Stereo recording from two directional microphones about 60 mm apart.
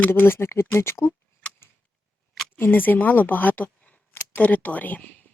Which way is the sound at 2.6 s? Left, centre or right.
Left.